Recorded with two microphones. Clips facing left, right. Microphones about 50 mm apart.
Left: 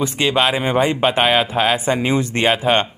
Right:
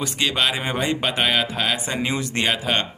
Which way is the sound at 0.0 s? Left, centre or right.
Centre.